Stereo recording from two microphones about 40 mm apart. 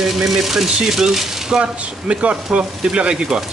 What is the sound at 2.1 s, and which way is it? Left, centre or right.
Speech, right.